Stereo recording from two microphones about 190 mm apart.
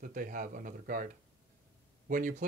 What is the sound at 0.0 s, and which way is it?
Speech, 45° right (ahead or behind).